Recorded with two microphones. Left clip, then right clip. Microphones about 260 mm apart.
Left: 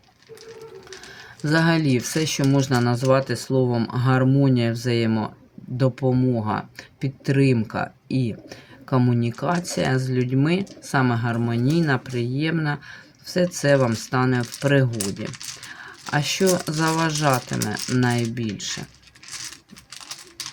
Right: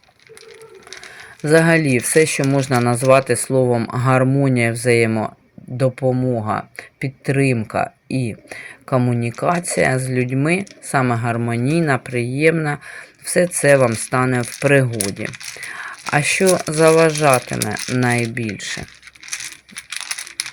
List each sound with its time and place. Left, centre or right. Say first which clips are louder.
1.5 s speech: right 7 dB; centre